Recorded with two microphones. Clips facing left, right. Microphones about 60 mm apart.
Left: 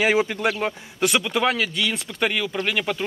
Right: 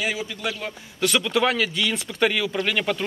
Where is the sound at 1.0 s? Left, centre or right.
Centre.